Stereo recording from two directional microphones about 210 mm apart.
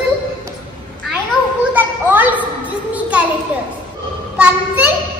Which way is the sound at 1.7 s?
10° right (ahead or behind).